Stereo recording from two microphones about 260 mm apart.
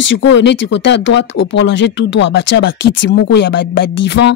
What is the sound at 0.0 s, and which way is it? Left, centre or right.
A woman's voice, left.